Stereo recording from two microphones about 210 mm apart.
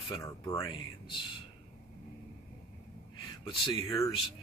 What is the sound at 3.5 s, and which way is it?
Speech, 20° left (ahead or behind).